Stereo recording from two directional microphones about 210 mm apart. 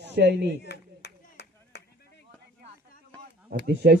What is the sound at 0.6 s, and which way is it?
Clapping, 50° left (ahead or behind).